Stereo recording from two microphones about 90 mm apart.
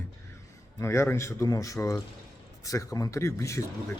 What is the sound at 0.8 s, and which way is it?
Speech, 30° left (ahead or behind).